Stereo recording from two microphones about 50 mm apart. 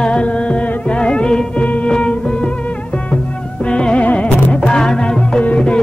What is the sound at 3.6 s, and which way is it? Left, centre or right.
Music, centre.